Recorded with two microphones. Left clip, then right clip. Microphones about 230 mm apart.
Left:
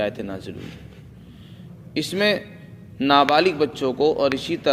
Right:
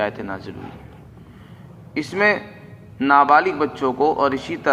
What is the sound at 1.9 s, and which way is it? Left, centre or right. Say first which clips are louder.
A man's voice: right 3 dB; left.